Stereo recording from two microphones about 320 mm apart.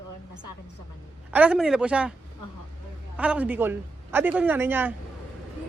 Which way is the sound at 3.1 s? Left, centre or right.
Centre.